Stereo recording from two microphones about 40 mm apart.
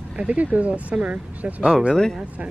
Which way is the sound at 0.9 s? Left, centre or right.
Right.